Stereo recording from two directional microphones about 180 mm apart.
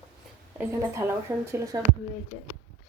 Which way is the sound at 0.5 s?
10° right (ahead or behind).